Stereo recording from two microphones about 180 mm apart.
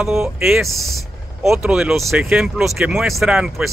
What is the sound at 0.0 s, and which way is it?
Speech, centre (ahead or behind).